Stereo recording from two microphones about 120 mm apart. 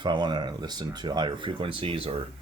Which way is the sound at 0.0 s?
40° right (ahead or behind).